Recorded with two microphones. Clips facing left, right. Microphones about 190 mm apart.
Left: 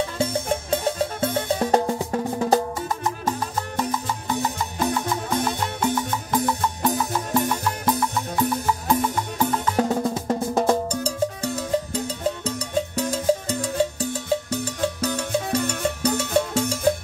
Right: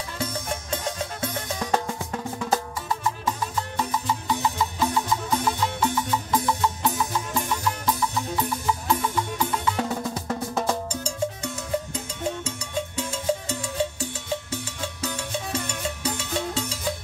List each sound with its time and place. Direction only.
0.2 s music: 30° left (ahead or behind); by 8.7 s 50° left (ahead or behind)
9.4 s drum: 45° left (ahead or behind)
10.1 s music: 25° left (ahead or behind); by 16.8 s 45° left (ahead or behind)